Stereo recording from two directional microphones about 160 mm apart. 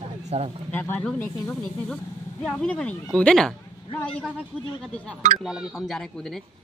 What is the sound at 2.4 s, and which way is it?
Speech, 5° left (ahead or behind).